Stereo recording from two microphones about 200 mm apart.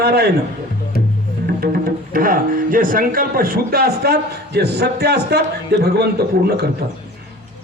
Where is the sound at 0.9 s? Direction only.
50° left (ahead or behind).